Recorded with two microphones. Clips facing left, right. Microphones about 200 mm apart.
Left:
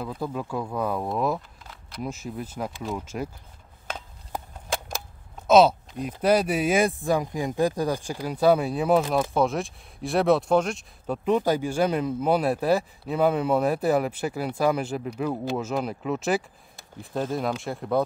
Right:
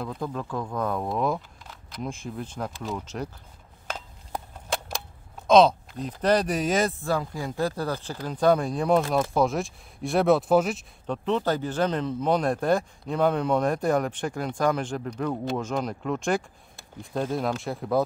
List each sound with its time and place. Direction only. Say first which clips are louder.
0.0 s speech: left 1 dB; 5° left (ahead or behind)
3.9 s a sound: even; centre (ahead or behind)
5.5 s speech: even; 5° left (ahead or behind)
11.1 s speech: left 3 dB; 10° left (ahead or behind)